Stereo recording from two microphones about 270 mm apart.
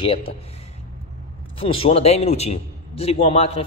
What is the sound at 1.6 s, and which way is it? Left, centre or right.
Speech, centre.